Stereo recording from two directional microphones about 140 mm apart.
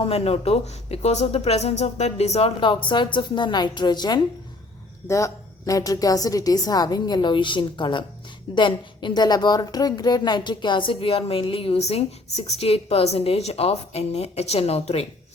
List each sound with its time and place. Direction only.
0.0 s a woman's voice: 45° left (ahead or behind)
5.0 s a woman's voice: 20° left (ahead or behind); by 15.0 s 45° left (ahead or behind)